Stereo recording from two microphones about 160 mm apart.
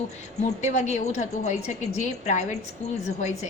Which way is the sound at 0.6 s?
45° left (ahead or behind).